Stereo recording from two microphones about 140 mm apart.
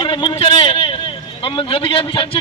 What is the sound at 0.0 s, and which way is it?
A man's voice, 35° left (ahead or behind).